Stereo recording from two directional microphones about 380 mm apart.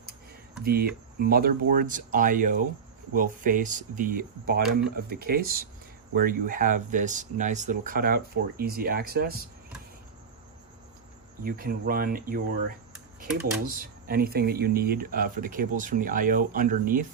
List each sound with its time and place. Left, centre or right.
0.6 s speech: right
11.4 s speech: right